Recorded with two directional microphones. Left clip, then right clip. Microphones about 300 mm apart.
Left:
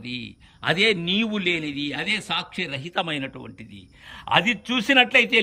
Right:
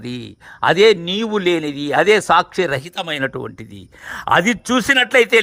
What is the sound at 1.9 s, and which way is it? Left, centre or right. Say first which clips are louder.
Speech: right 15 dB; right.